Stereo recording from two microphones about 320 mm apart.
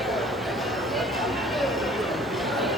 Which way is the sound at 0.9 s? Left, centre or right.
Centre.